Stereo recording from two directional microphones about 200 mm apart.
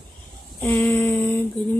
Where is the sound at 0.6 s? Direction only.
10° left (ahead or behind).